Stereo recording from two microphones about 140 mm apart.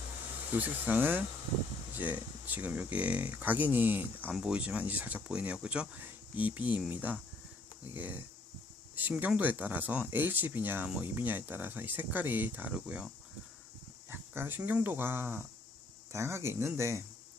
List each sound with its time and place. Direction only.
0.5 s speech: 10° right (ahead or behind)
14.1 s speech: 15° right (ahead or behind)